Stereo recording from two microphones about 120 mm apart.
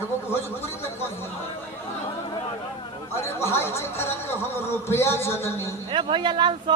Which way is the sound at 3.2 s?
20° left (ahead or behind).